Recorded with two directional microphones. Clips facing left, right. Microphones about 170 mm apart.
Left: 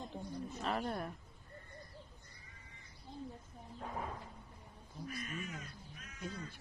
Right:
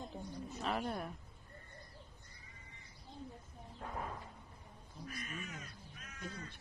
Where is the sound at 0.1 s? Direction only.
Centre (ahead or behind).